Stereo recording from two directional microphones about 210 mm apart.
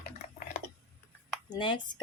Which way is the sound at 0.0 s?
35° left (ahead or behind).